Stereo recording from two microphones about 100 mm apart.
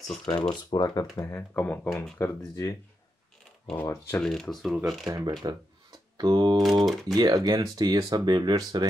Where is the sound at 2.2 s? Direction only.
35° left (ahead or behind).